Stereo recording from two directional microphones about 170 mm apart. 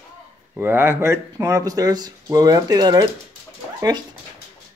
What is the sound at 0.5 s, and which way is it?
Speech, 15° right (ahead or behind).